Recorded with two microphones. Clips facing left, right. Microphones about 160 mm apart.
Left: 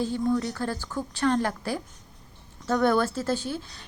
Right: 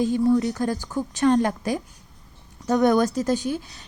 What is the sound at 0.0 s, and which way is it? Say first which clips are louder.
A woman's voice: right 6 dB; 15° right (ahead or behind).